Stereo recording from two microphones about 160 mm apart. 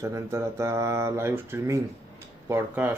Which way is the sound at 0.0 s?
15° right (ahead or behind).